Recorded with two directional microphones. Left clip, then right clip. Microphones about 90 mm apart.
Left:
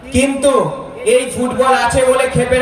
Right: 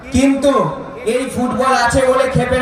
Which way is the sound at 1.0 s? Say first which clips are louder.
Left 4 dB; 20° left (ahead or behind).